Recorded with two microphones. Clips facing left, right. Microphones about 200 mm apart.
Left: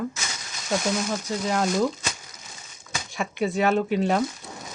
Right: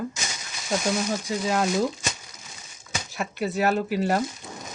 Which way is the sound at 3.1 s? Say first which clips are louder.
Left 2 dB; centre (ahead or behind).